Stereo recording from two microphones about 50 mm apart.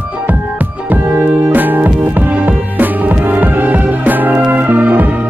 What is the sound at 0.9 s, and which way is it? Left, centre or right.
Music, right.